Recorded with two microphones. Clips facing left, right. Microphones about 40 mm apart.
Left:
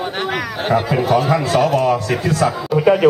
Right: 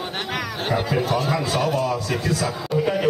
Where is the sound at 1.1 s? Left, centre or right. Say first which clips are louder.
Left 7 dB; left.